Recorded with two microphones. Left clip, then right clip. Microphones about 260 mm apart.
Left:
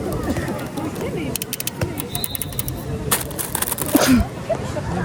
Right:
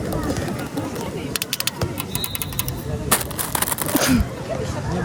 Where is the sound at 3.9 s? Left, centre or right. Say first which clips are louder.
Left 4 dB; centre.